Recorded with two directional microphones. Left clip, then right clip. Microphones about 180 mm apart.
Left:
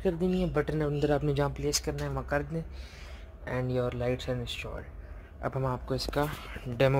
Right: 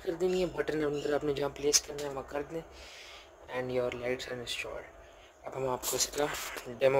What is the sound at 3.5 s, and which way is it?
Speech, 5° left (ahead or behind).